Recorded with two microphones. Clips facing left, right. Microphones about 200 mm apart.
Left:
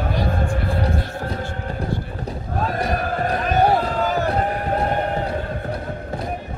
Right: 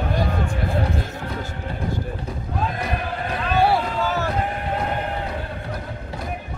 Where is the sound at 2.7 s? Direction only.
40° left (ahead or behind).